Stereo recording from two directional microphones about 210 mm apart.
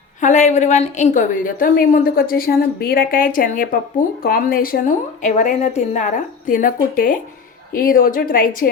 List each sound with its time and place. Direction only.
0.2 s a woman's voice: 35° left (ahead or behind)